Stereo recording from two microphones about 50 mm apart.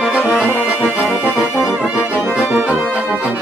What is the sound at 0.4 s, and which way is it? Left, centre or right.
Music, left.